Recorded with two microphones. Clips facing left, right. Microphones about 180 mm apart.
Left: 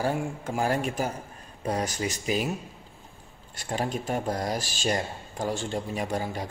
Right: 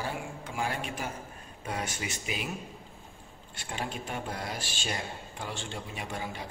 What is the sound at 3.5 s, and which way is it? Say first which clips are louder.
A man's voice: left 7 dB; 40° left (ahead or behind).